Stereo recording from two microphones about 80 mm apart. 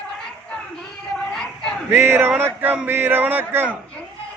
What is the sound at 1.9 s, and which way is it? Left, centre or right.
A man's voice, right.